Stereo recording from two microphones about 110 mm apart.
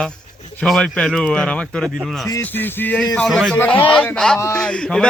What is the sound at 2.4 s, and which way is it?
Speech, 15° left (ahead or behind).